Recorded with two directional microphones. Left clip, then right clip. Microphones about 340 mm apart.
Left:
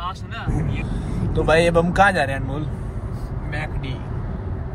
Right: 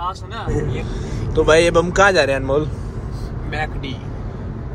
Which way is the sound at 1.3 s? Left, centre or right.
Centre.